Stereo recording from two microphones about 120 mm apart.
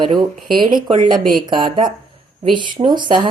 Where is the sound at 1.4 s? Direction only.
40° right (ahead or behind).